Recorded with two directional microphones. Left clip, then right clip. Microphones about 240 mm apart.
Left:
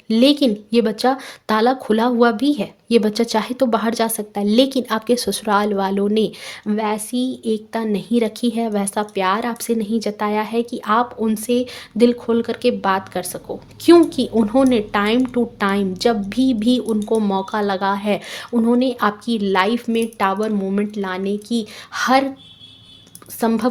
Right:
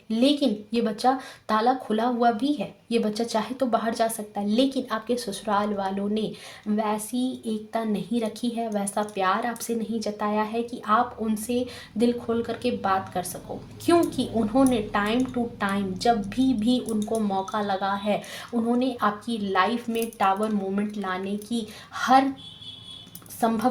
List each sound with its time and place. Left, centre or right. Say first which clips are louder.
0.1 s speech: left 8 dB; left
23.4 s speech: left 5 dB; left